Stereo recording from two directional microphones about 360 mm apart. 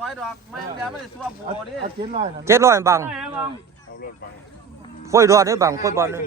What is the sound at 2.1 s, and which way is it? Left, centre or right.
A man's voice, centre.